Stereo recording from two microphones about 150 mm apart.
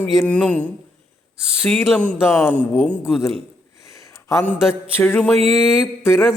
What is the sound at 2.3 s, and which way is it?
Mantra, 10° left (ahead or behind).